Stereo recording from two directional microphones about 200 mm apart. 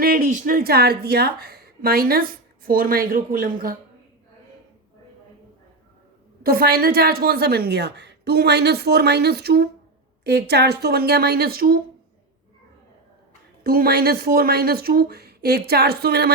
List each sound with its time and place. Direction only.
0.0 s a woman's voice: 45° right (ahead or behind)
6.4 s a woman's voice: 50° right (ahead or behind)
13.7 s a woman's voice: 50° right (ahead or behind)